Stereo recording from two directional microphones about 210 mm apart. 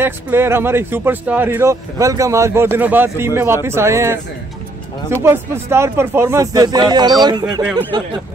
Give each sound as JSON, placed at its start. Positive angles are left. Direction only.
{"t": 0.0, "sound": "speech", "side_deg": -10}
{"t": 5.2, "sound": "speech", "side_deg": -10}